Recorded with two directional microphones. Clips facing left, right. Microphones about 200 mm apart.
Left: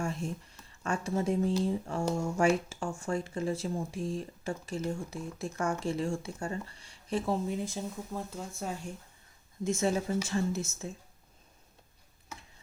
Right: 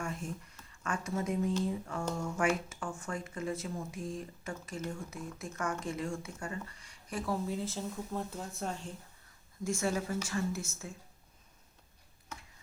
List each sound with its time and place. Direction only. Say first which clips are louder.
0.0 s speech: left 4 dB; 30° left (ahead or behind)
8.1 s speech: even; centre (ahead or behind)
9.6 s speech: left 4 dB; 20° left (ahead or behind)